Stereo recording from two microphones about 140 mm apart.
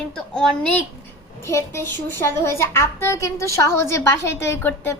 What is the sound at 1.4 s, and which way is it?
A woman's voice, 20° left (ahead or behind).